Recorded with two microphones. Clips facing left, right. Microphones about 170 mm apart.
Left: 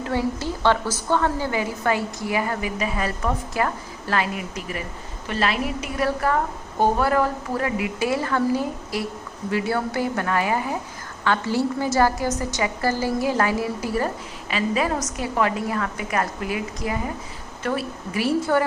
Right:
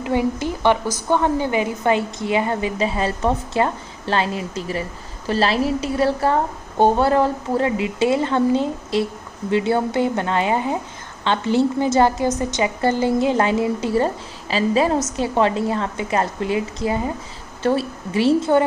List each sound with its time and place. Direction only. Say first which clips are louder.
0.0 s a woman's voice: right 4 dB; 15° right (ahead or behind)